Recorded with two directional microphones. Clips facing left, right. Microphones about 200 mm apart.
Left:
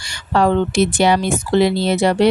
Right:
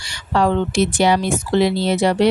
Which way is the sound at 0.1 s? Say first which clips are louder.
Left 2 dB; 50° left (ahead or behind).